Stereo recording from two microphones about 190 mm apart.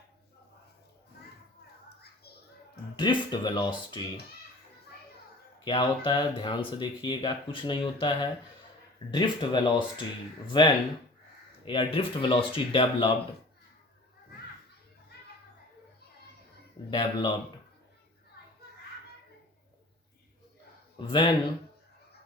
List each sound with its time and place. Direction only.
2.9 s speech: 25° left (ahead or behind)
5.6 s speech: 25° left (ahead or behind)
16.9 s speech: 25° left (ahead or behind)
21.1 s speech: 25° left (ahead or behind)